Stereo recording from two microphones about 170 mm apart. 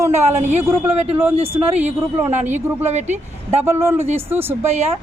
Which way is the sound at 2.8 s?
40° right (ahead or behind).